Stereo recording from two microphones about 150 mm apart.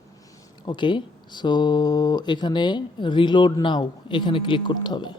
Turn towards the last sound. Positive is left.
turn(degrees=30)  # may be behind; listen again after turning